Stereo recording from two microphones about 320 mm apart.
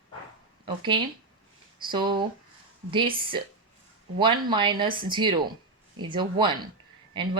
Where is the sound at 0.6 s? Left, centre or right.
Centre.